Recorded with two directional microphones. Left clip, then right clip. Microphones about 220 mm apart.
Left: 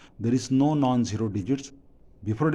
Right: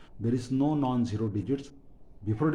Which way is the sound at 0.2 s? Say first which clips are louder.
Left 5 dB; 45° left (ahead or behind).